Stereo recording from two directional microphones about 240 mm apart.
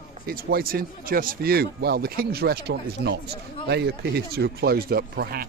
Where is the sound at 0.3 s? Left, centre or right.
Right.